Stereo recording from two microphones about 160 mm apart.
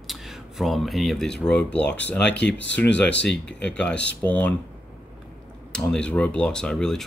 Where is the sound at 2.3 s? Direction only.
90° left.